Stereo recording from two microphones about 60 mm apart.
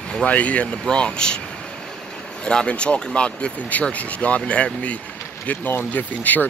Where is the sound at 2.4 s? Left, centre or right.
Centre.